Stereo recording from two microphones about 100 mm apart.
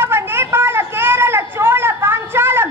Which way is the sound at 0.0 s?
25° right (ahead or behind).